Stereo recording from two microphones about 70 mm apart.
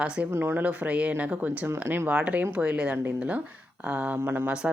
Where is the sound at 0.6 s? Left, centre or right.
Right.